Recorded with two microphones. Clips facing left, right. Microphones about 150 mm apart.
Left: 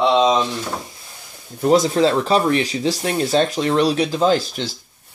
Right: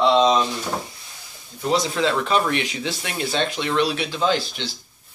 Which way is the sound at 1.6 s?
45° left (ahead or behind).